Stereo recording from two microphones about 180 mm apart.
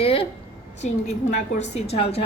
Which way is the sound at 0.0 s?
30° left (ahead or behind).